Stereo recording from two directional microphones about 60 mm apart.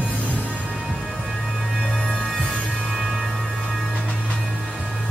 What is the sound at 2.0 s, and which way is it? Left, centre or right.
Music, centre.